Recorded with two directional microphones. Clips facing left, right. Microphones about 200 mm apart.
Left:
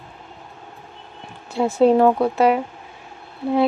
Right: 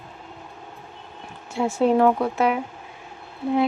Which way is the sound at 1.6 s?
35° left (ahead or behind).